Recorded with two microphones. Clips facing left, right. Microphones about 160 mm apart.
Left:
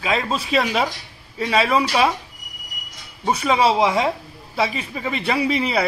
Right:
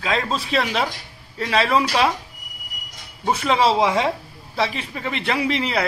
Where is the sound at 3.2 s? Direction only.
15° left (ahead or behind).